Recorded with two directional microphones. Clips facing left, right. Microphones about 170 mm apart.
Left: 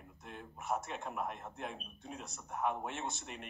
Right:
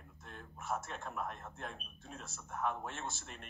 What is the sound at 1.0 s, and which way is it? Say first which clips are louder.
A man's voice: left 2 dB; 15° left (ahead or behind).